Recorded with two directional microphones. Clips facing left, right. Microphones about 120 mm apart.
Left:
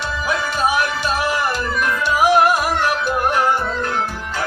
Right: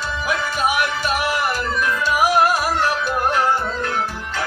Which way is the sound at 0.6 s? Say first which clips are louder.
Left 2 dB; 30° left (ahead or behind).